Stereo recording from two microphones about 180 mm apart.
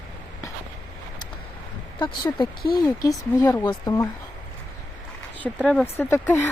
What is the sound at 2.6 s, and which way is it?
Speech, 55° left (ahead or behind).